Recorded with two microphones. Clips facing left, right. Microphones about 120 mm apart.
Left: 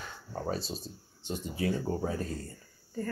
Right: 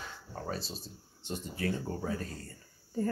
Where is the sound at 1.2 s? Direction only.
10° left (ahead or behind).